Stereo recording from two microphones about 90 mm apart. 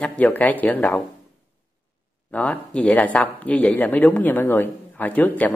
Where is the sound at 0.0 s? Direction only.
15° left (ahead or behind).